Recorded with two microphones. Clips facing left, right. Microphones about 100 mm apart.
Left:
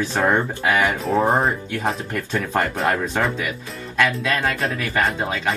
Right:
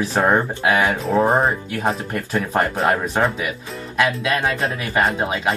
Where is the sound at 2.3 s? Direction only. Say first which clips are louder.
Right 2 dB; 15° right (ahead or behind).